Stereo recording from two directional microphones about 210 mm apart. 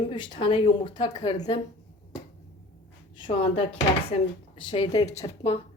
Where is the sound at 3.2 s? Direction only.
25° left (ahead or behind).